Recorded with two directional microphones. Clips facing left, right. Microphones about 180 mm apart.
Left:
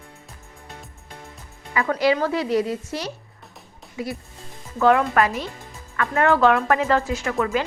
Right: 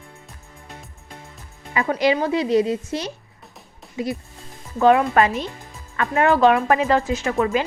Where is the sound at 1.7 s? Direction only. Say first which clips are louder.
Right 1 dB; 20° right (ahead or behind).